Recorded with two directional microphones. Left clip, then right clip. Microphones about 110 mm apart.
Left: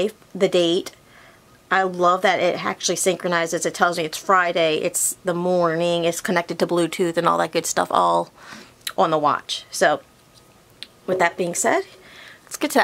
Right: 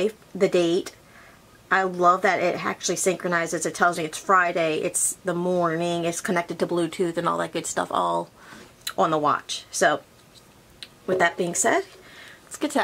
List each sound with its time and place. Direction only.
0.0 s a woman's voice: 30° left (ahead or behind)